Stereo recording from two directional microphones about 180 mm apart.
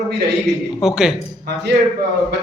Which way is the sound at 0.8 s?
5° right (ahead or behind).